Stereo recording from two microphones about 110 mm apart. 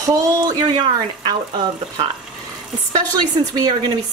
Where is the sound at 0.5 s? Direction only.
40° right (ahead or behind).